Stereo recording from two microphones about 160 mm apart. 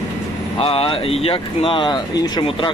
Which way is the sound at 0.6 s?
35° left (ahead or behind).